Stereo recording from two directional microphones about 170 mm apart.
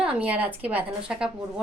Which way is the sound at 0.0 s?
5° right (ahead or behind).